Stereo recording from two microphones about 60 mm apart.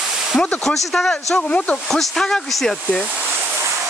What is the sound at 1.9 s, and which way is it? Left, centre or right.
Speech, centre.